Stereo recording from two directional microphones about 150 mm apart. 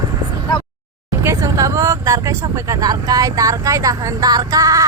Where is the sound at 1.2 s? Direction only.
20° right (ahead or behind).